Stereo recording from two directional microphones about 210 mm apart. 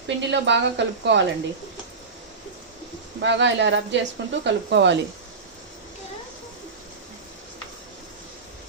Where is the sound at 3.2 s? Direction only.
60° right (ahead or behind).